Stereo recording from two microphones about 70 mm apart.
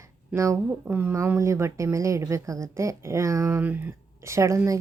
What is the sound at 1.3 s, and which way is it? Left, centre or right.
Speech, right.